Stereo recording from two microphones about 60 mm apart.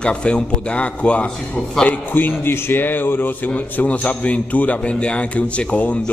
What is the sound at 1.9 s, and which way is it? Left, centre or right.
Speech, left.